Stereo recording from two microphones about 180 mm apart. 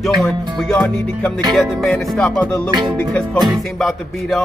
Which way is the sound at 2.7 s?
25° right (ahead or behind).